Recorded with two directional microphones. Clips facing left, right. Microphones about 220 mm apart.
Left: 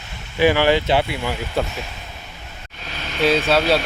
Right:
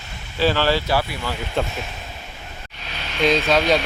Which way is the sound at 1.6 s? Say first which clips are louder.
Even; 5° left (ahead or behind).